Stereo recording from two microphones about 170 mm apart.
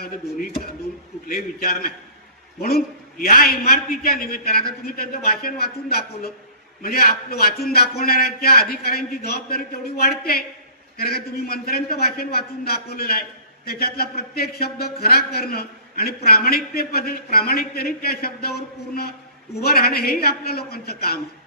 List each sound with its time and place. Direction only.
1.3 s a man's voice: 60° left (ahead or behind)